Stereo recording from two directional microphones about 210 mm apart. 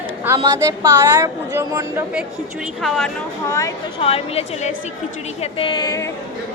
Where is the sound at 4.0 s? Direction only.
25° left (ahead or behind).